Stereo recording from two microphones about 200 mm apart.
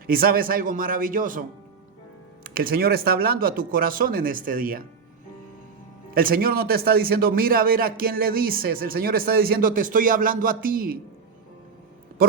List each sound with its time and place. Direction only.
0.1 s speech: 45° right (ahead or behind)
6.1 s speech: 45° right (ahead or behind)